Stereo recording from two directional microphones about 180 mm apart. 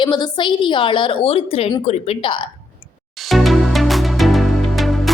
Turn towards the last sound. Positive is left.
turn(degrees=0)  # may be behind; listen again after turning